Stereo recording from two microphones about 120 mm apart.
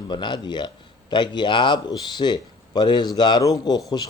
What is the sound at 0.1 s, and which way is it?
Speech, 40° left (ahead or behind).